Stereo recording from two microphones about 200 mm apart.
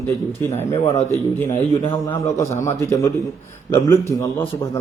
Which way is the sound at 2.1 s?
15° left (ahead or behind).